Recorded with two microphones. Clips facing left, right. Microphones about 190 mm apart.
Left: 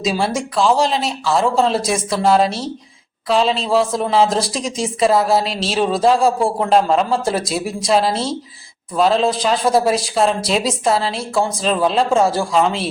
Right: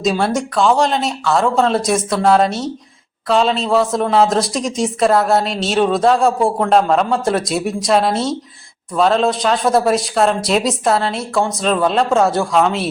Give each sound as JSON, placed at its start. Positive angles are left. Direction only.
{"t": 0.0, "sound": "a woman's voice", "side_deg": 0}